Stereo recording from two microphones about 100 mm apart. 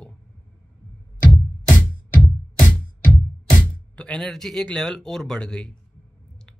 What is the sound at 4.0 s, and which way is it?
Speech, 5° left (ahead or behind).